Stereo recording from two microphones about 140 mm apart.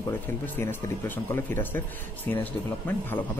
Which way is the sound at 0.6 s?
15° left (ahead or behind).